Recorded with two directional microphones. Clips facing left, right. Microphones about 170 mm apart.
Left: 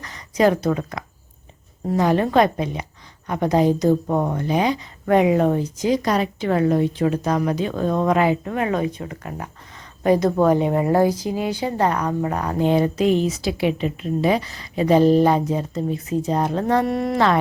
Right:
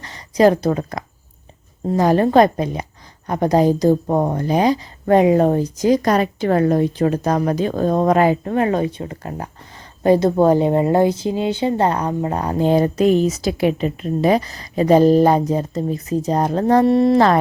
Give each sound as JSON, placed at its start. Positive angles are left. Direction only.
{"t": 0.0, "sound": "speech", "side_deg": -30}